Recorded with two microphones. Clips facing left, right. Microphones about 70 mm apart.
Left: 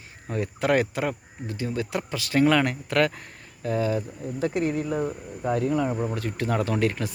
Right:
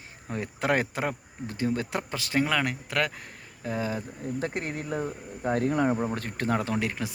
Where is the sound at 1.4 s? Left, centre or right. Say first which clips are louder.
Right 1 dB; right.